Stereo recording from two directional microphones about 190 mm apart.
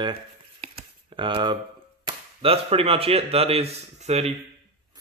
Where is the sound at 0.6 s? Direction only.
25° right (ahead or behind).